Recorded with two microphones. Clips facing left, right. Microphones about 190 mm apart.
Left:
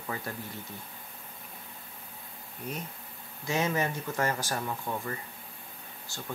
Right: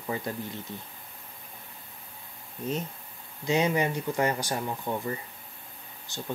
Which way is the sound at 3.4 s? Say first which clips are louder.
Right 4 dB; 15° right (ahead or behind).